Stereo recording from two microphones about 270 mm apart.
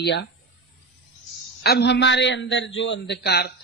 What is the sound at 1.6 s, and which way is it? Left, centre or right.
A man's voice, left.